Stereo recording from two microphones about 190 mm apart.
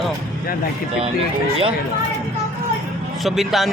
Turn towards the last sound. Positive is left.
turn(degrees=0)  # may be behind; listen again after turning